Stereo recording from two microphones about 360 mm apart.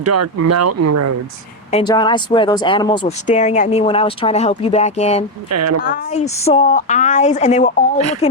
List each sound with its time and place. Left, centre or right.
0.0 s speech: right
1.7 s speech: centre
5.5 s speech: right
5.8 s speech: left